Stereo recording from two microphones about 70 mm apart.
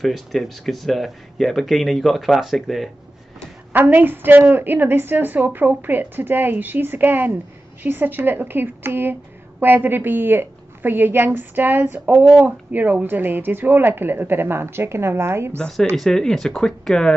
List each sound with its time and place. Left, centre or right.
0.0 s speech: centre
3.7 s a woman's voice: right
16.0 s speech: centre